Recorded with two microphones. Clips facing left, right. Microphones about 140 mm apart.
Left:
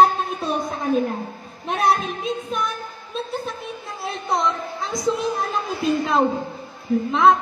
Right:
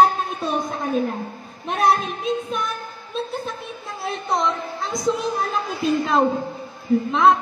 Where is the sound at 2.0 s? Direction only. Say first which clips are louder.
Right 2 dB; centre (ahead or behind).